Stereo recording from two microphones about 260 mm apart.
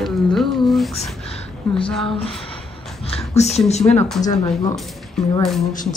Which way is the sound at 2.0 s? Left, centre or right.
Left.